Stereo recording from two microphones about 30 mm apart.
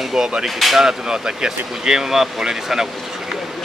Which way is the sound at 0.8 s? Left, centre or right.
Centre.